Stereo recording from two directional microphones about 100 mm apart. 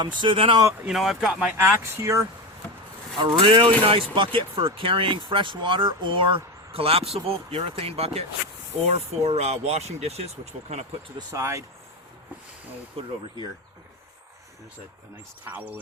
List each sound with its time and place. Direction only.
0.0 s speech: 55° right (ahead or behind)
0.9 s speech: centre (ahead or behind)
1.5 s speech: 25° right (ahead or behind)
3.2 s speech: 55° right (ahead or behind); by 10.8 s 90° right
11.3 s speech: 30° right (ahead or behind)
13.0 s speech: 70° right (ahead or behind)
15.4 s speech: 20° right (ahead or behind)